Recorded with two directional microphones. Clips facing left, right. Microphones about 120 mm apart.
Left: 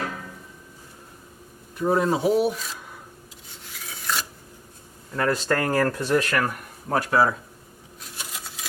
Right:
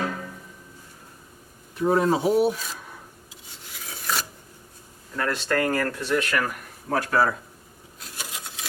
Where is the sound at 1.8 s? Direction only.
Centre (ahead or behind).